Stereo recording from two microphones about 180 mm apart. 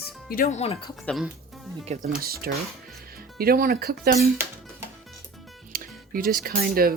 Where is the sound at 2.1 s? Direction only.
55° right (ahead or behind).